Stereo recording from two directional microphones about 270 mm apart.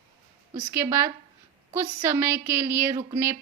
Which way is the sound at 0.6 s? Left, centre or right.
Centre.